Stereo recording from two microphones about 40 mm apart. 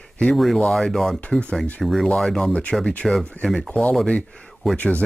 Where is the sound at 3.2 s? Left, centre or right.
Left.